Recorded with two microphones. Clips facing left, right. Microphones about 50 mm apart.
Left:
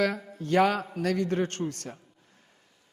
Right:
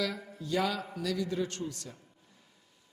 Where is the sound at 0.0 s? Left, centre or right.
Left.